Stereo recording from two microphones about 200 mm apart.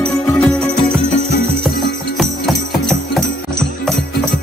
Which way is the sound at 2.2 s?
Centre (ahead or behind).